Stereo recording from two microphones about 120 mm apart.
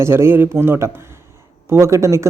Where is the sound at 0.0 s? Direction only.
20° right (ahead or behind).